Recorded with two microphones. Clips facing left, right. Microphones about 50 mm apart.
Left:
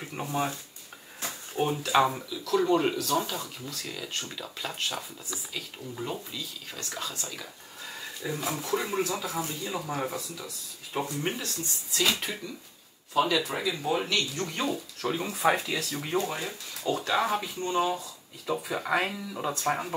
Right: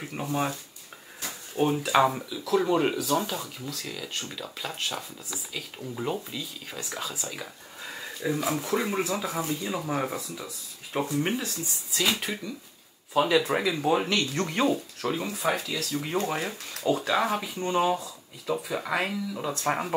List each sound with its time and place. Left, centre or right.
0.0 s speech: centre
1.6 s speech: centre
5.9 s speech: centre
8.7 s speech: right
11.9 s speech: centre
13.4 s speech: right
15.0 s speech: centre
15.5 s speech: centre
16.3 s speech: right
16.9 s speech: centre
17.6 s speech: centre
18.0 s speech: centre
19.6 s speech: centre